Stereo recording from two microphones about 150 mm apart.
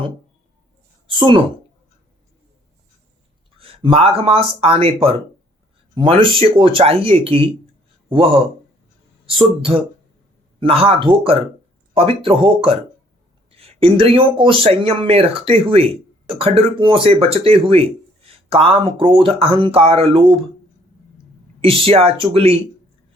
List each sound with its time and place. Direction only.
1.0 s speech: 35° right (ahead or behind)
3.6 s speech: 40° right (ahead or behind)
9.2 s speech: 35° right (ahead or behind)
21.6 s speech: 40° right (ahead or behind)